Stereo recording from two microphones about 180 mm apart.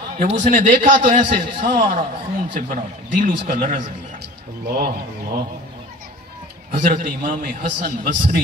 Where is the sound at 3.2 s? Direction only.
50° right (ahead or behind).